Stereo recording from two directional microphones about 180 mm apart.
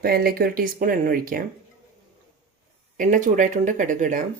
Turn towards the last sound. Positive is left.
turn(degrees=-45)  # may be behind; listen again after turning